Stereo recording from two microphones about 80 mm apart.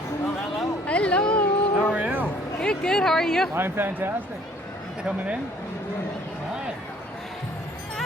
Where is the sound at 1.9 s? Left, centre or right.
Right.